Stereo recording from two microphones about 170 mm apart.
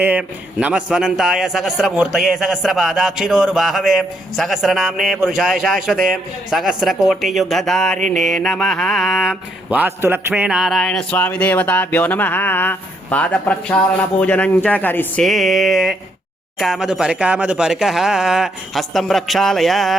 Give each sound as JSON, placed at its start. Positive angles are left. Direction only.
{"t": 0.0, "sound": "a man's voice", "side_deg": -10}
{"t": 9.6, "sound": "a man's voice", "side_deg": -10}